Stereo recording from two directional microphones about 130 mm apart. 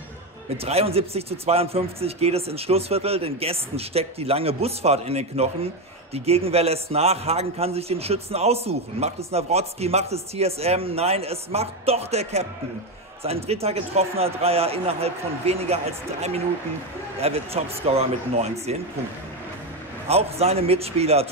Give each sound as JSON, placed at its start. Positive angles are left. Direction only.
{"t": 0.7, "sound": "a man's voice", "side_deg": -50}
{"t": 20.1, "sound": "a man's voice", "side_deg": -50}